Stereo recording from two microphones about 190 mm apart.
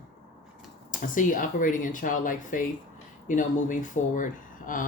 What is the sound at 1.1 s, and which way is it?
Speech, 45° left (ahead or behind).